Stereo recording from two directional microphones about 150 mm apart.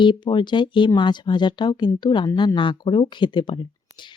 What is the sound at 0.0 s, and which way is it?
A woman's voice, 30° left (ahead or behind).